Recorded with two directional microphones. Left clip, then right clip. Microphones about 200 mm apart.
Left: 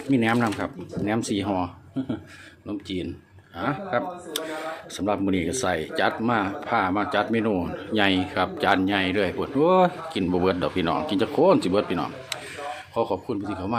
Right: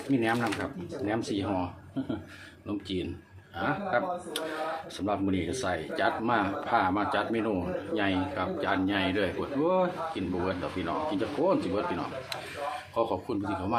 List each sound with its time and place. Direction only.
0.1 s speech: 40° left (ahead or behind)
7.9 s speech: 45° left (ahead or behind)
12.9 s speech: 30° left (ahead or behind)